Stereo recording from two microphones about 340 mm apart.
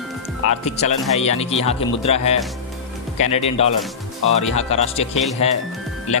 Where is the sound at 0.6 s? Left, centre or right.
Centre.